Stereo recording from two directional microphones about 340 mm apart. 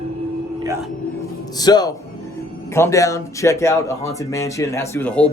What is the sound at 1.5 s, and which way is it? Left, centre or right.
Speech, centre.